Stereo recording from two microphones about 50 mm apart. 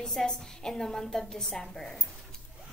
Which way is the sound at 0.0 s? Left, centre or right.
Centre.